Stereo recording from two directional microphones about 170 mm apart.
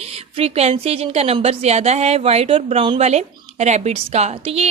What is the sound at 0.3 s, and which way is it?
A woman's voice, 35° right (ahead or behind).